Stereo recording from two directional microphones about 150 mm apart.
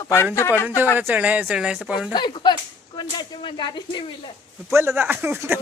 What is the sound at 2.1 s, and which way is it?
Speech, 30° left (ahead or behind).